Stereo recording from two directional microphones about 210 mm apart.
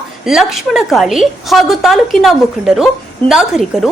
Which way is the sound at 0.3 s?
Centre (ahead or behind).